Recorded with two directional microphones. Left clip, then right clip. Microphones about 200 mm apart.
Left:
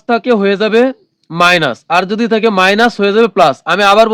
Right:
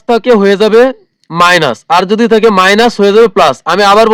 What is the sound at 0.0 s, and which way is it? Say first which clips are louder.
Speech: right 4 dB; 40° right (ahead or behind).